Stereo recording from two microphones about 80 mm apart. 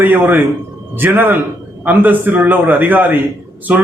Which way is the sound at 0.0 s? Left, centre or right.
Right.